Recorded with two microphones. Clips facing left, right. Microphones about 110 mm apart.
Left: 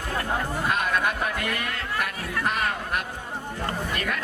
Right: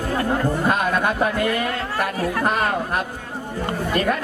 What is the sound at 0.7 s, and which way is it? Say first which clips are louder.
Speech: right 2 dB; 40° right (ahead or behind).